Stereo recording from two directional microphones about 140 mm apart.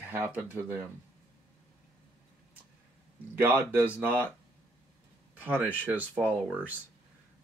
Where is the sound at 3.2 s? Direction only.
15° right (ahead or behind).